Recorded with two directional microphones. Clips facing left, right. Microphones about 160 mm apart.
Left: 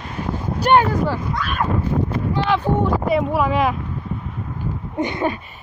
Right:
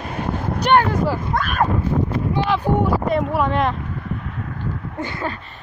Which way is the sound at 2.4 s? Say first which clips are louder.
Left 1 dB; centre (ahead or behind).